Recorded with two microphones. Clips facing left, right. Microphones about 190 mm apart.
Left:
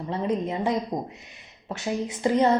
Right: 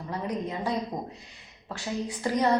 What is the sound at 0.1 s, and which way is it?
A woman's voice, 25° left (ahead or behind).